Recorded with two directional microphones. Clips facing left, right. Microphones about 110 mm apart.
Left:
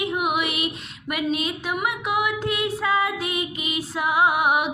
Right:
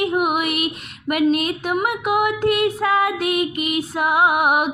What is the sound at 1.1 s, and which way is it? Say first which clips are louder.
Female singing: right 7 dB; 55° right (ahead or behind).